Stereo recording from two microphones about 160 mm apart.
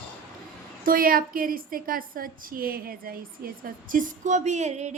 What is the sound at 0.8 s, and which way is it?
A woman's voice, 65° right (ahead or behind).